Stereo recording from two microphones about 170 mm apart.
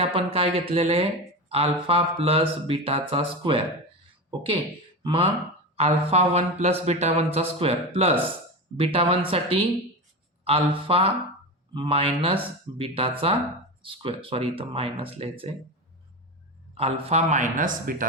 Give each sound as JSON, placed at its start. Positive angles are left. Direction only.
{"t": 0.0, "sound": "speech", "side_deg": -35}
{"t": 5.0, "sound": "speech", "side_deg": -30}
{"t": 16.7, "sound": "a man's voice", "side_deg": -35}